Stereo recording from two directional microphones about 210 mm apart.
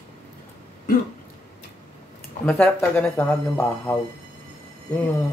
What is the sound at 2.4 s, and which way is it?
Speech, 5° left (ahead or behind).